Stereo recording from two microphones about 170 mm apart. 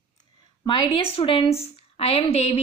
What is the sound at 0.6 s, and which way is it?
A woman's voice, 30° left (ahead or behind).